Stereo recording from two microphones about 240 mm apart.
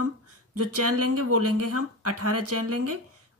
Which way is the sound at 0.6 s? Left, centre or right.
Right.